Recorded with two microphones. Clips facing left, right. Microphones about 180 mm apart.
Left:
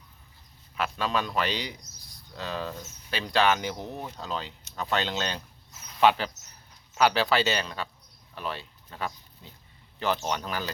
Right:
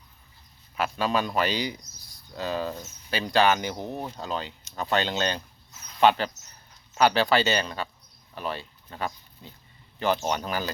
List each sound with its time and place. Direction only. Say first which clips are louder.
0.8 s speech: right 3 dB; 5° right (ahead or behind)